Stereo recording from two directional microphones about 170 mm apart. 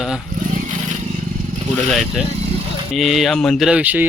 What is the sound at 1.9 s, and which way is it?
A man's voice, centre (ahead or behind).